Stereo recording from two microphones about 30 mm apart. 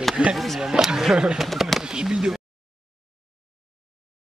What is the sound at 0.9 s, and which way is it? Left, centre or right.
Speech, centre.